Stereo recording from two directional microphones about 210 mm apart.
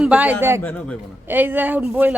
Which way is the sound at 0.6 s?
5° left (ahead or behind).